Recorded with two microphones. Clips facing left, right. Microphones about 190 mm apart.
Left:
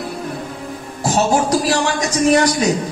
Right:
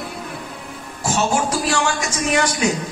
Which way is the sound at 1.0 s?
35° left (ahead or behind).